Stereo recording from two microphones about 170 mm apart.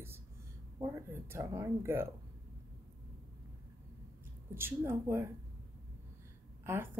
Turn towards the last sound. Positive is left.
turn(degrees=-10)  # may be behind; listen again after turning